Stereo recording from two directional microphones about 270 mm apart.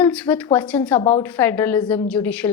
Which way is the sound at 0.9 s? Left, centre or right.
Left.